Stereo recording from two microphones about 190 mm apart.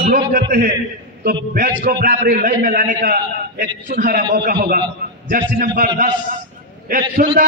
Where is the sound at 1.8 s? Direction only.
55° right (ahead or behind).